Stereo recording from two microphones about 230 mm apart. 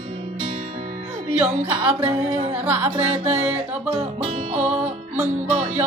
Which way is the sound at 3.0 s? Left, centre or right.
Right.